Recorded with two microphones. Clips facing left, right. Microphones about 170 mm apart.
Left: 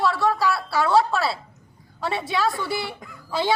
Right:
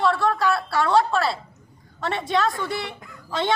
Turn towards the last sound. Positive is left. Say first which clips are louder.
# left 1 dB
turn(degrees=5)  # may be behind; listen again after turning